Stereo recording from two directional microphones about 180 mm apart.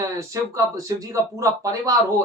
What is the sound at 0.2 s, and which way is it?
Speech, 15° right (ahead or behind).